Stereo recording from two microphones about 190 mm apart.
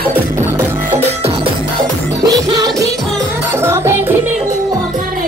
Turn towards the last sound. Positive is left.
turn(degrees=-15)  # may be behind; listen again after turning